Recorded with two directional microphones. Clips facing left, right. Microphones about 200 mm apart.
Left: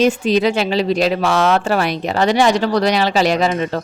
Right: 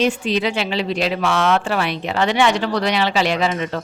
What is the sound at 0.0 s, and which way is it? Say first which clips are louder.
A woman's voice: left 5 dB; 40° left (ahead or behind).